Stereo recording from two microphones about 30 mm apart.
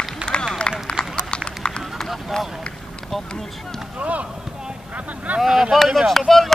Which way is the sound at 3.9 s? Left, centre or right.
Right.